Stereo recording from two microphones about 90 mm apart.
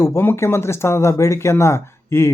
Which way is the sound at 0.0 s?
25° left (ahead or behind).